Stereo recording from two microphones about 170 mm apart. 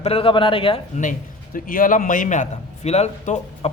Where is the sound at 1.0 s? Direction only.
50° left (ahead or behind).